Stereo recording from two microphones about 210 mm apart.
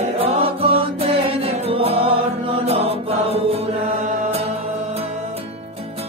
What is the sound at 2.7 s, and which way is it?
Mantra, 30° right (ahead or behind).